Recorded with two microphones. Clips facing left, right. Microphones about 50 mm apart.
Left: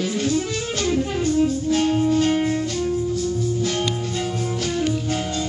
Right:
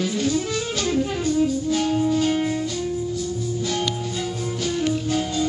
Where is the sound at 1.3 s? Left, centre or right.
Left.